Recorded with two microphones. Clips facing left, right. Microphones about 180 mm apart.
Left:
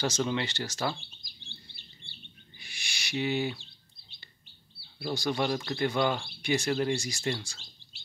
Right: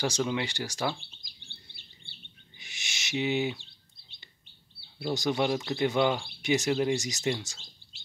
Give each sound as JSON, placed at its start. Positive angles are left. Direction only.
{"t": 0.0, "sound": "speech", "side_deg": -10}
{"t": 2.6, "sound": "owl", "side_deg": -20}
{"t": 4.9, "sound": "speech", "side_deg": -20}